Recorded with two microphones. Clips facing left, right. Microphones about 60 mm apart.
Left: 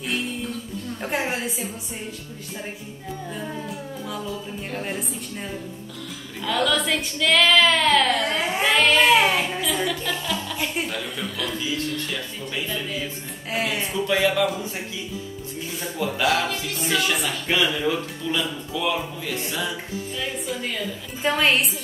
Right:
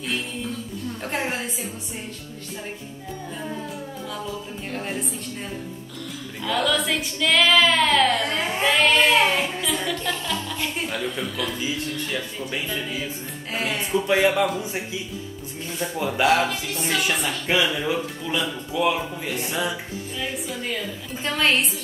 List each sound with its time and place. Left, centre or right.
1.0 s speech: centre
3.3 s speech: centre
6.4 s a man's voice: centre
13.5 s speech: centre
13.9 s speech: right
16.0 s a man's voice: centre
17.6 s a man's voice: centre
20.2 s speech: centre